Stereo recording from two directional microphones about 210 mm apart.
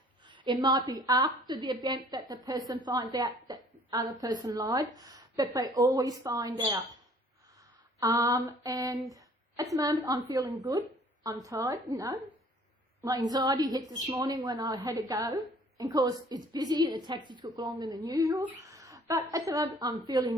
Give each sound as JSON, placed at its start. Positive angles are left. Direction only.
{"t": 0.3, "sound": "a woman's voice", "side_deg": -20}
{"t": 7.9, "sound": "a woman's voice", "side_deg": -15}